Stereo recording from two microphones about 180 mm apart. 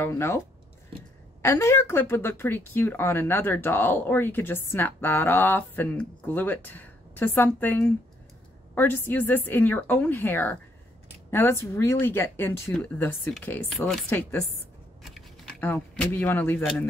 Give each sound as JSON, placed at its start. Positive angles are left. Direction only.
{"t": 0.0, "sound": "a woman's voice", "side_deg": 15}
{"t": 1.4, "sound": "a woman's voice", "side_deg": 15}